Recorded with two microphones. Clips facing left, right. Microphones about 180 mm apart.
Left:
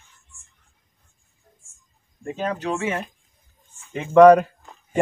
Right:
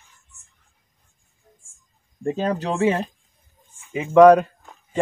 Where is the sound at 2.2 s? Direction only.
35° right (ahead or behind).